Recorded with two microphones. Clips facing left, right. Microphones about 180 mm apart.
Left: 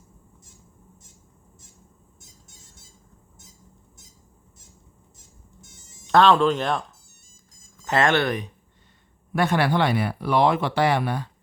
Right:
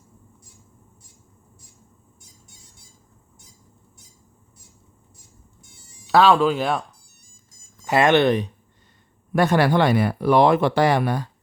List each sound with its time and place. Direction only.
6.1 s speech: 5° right (ahead or behind)
7.9 s speech: 15° right (ahead or behind)
9.3 s speech: 40° right (ahead or behind)